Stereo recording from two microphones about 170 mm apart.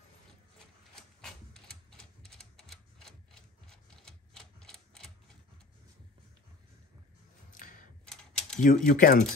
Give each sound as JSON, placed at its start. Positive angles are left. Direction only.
{"t": 1.2, "sound": "typewriter", "side_deg": 0}
{"t": 7.5, "sound": "typewriter", "side_deg": 50}
{"t": 8.1, "sound": "typing", "side_deg": 5}
{"t": 8.6, "sound": "speech", "side_deg": 50}